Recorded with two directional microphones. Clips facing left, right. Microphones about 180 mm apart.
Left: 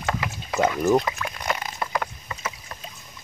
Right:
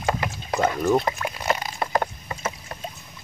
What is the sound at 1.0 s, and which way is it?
Speech, 30° right (ahead or behind).